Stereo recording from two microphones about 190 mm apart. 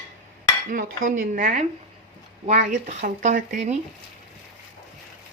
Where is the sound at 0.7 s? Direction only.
45° right (ahead or behind).